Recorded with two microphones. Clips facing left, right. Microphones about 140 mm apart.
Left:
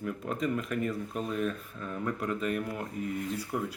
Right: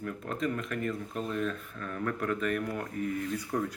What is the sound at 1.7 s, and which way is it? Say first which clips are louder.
Speech: even; 20° left (ahead or behind).